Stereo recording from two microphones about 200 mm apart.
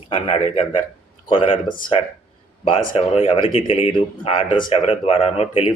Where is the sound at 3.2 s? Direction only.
25° left (ahead or behind).